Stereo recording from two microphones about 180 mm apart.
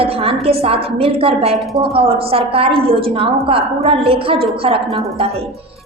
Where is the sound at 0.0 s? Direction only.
30° right (ahead or behind).